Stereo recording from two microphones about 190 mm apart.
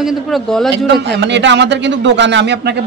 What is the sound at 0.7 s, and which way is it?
A man's voice, 65° right (ahead or behind).